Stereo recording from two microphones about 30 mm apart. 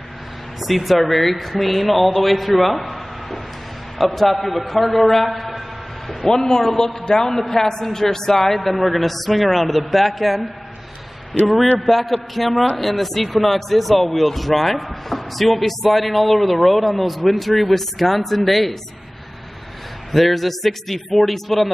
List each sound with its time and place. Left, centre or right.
0.6 s speech: centre
4.0 s a man's voice: centre
11.8 s speech: centre
20.1 s speech: centre